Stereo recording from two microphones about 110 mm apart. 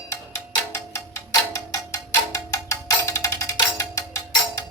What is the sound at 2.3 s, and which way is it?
Music, 25° left (ahead or behind).